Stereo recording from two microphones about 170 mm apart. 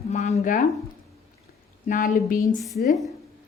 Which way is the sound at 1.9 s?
50° left (ahead or behind).